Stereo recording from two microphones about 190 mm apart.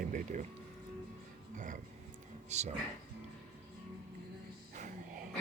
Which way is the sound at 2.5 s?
35° right (ahead or behind).